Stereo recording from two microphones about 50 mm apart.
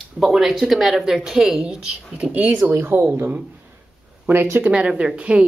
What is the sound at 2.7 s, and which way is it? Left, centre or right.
Speech, right.